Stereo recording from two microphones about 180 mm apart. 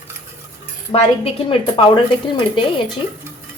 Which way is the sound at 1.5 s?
30° left (ahead or behind).